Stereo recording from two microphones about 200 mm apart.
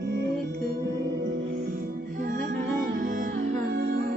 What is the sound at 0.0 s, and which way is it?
Music, 55° right (ahead or behind).